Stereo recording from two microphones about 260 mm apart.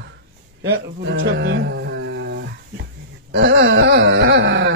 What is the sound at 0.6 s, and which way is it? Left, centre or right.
Speech, right.